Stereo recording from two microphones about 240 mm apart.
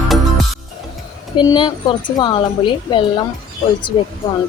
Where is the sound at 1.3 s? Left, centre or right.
Centre.